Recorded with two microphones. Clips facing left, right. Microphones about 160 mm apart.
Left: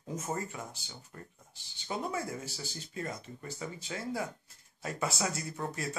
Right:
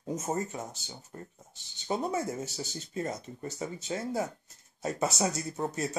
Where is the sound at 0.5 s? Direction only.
35° right (ahead or behind).